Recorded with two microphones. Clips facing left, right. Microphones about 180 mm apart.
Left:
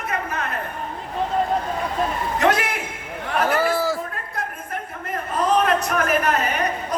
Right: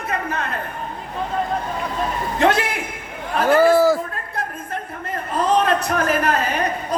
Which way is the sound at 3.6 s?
45° right (ahead or behind).